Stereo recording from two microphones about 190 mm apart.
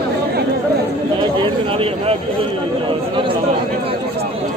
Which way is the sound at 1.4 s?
30° right (ahead or behind).